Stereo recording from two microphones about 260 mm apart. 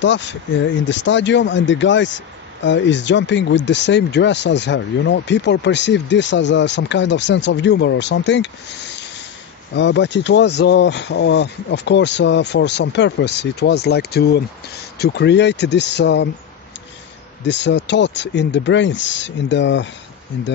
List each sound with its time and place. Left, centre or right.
0.0 s speech: left
9.8 s speech: left
17.4 s speech: left